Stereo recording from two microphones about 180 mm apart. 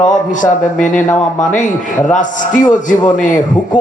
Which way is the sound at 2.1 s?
45° left (ahead or behind).